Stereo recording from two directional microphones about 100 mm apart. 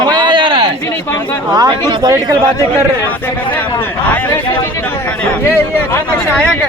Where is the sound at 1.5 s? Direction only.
45° right (ahead or behind).